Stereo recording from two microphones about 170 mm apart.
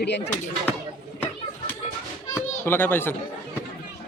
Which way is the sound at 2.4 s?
15° left (ahead or behind).